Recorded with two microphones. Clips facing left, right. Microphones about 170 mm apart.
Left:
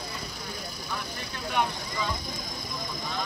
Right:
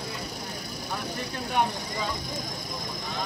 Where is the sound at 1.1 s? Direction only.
40° right (ahead or behind).